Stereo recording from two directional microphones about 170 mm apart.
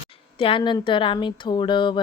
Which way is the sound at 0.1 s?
30° left (ahead or behind).